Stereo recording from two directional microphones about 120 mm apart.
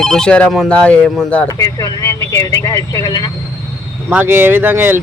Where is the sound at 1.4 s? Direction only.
30° left (ahead or behind).